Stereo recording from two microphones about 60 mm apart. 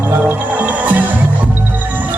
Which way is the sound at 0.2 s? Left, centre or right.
Right.